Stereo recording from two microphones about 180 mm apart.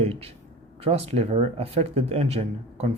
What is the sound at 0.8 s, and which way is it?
A man's voice, 35° right (ahead or behind).